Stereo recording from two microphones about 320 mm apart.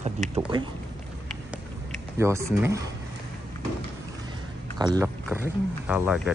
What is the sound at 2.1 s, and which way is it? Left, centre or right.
Speech, centre.